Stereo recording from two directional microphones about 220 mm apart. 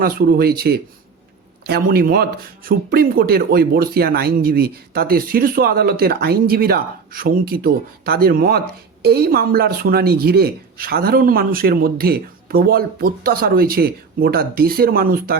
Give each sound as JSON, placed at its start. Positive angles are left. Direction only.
{"t": 0.0, "sound": "speech", "side_deg": -40}